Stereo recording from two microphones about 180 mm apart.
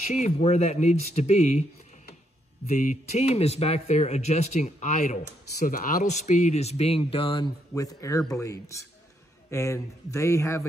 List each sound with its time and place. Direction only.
0.1 s speech: 40° left (ahead or behind)
2.7 s speech: 40° left (ahead or behind); by 10.7 s 15° left (ahead or behind)